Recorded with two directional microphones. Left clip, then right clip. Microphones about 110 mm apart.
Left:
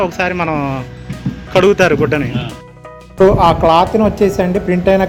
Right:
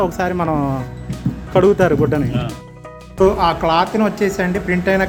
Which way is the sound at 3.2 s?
30° left (ahead or behind).